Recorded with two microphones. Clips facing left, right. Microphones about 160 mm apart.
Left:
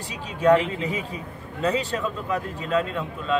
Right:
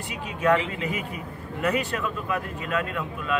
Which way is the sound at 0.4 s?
30° left (ahead or behind).